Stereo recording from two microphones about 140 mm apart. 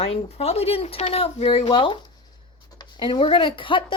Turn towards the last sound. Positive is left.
turn(degrees=35)  # may be behind; listen again after turning